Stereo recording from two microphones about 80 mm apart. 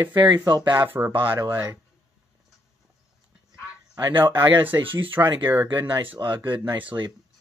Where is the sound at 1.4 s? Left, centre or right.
Right.